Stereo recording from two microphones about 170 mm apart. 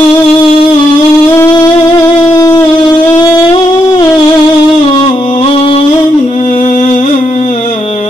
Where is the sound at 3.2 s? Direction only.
25° left (ahead or behind).